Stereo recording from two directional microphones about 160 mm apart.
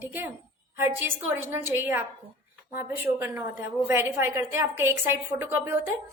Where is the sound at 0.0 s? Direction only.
15° right (ahead or behind).